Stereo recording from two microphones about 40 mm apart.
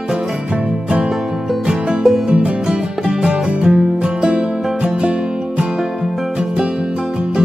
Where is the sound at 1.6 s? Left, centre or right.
Centre.